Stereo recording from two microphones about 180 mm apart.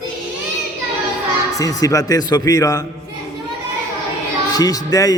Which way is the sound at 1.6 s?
20° left (ahead or behind).